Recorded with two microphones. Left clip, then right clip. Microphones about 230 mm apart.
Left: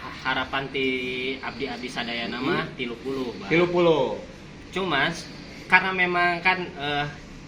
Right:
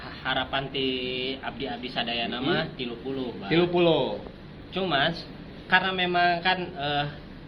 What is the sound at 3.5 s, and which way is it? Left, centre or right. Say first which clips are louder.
Speech: left 2 dB; centre.